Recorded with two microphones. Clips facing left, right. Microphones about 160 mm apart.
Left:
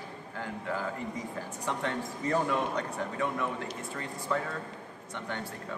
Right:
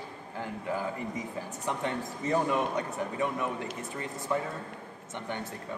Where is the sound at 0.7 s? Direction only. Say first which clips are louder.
Right 2 dB; 15° right (ahead or behind).